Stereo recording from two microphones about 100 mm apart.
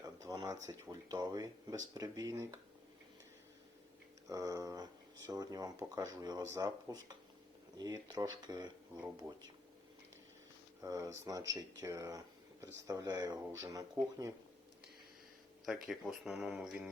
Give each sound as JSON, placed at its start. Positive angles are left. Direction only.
{"t": 0.0, "sound": "a sound", "side_deg": -35}
{"t": 0.4, "sound": "speech", "side_deg": -25}
{"t": 2.3, "sound": "speech", "side_deg": -30}
{"t": 4.3, "sound": "speech", "side_deg": -35}
{"t": 6.8, "sound": "speech", "side_deg": -40}
{"t": 10.8, "sound": "speech", "side_deg": -35}
{"t": 15.6, "sound": "speech", "side_deg": -5}